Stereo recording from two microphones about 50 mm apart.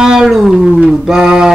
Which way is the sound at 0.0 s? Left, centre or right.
Centre.